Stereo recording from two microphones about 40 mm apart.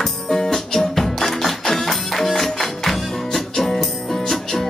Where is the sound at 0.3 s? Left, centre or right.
Centre.